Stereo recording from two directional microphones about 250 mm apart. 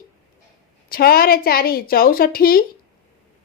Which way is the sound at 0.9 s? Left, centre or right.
Left.